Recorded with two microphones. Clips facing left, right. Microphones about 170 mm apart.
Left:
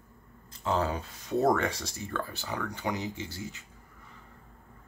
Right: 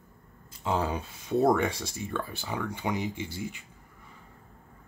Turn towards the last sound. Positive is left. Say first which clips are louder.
# right 2 dB
turn(degrees=-15)  # may be behind; listen again after turning